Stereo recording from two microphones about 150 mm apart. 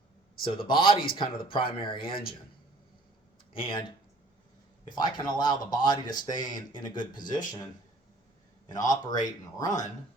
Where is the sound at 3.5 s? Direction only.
35° left (ahead or behind).